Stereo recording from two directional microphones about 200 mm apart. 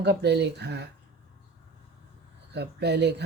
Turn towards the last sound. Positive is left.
turn(degrees=-55)  # may be behind; listen again after turning